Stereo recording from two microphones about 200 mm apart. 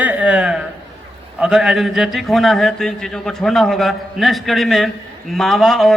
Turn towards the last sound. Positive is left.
turn(degrees=0)  # may be behind; listen again after turning